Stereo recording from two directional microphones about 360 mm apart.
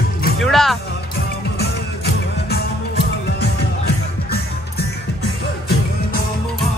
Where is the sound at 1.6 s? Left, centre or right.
Left.